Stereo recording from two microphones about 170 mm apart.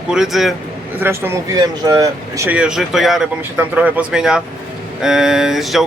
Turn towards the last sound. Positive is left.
turn(degrees=0)  # may be behind; listen again after turning